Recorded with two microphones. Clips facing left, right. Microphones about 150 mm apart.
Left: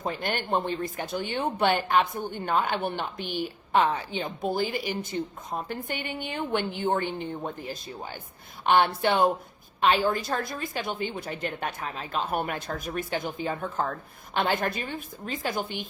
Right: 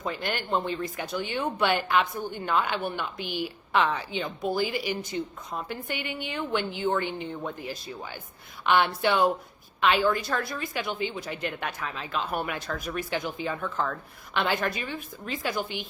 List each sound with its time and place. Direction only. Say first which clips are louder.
0.0 s a woman's voice: left 1 dB; 50° left (ahead or behind)